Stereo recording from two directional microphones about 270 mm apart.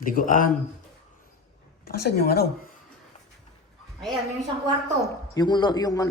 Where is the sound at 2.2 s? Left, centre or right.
Left.